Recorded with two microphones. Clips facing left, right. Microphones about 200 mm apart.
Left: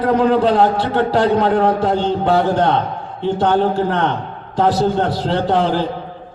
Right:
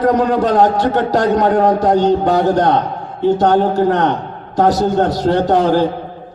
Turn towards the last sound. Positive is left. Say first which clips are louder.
# right 4 dB
turn(degrees=-45)  # may be behind; listen again after turning